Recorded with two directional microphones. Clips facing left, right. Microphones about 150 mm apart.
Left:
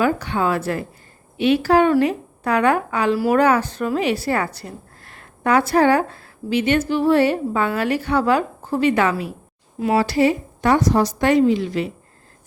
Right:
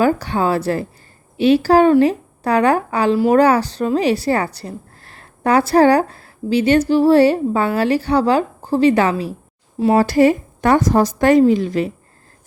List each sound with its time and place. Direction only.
0.0 s a woman's voice: 35° right (ahead or behind)
10.0 s a woman's voice: 45° right (ahead or behind)